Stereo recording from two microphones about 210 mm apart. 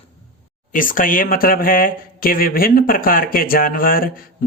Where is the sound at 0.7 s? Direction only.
40° left (ahead or behind).